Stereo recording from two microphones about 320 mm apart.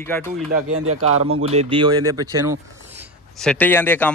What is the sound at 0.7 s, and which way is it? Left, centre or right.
Speech, right.